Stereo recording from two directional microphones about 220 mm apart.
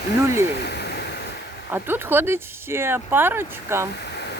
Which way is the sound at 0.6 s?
50° left (ahead or behind).